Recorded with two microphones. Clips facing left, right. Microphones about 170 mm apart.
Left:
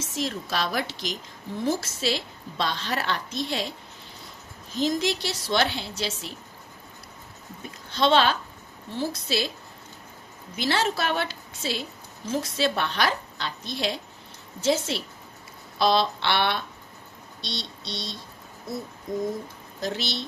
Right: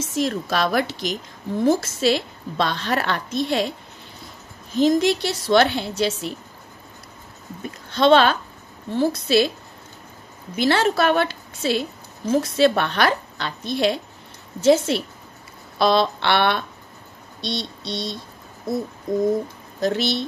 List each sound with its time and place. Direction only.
0.1 s a woman's voice: 55° right (ahead or behind)
4.7 s a woman's voice: 55° right (ahead or behind)
7.9 s a woman's voice: 55° right (ahead or behind)
10.5 s a woman's voice: 60° right (ahead or behind)
17.4 s a sound: 55° right (ahead or behind)
19.8 s a woman's voice: 55° right (ahead or behind)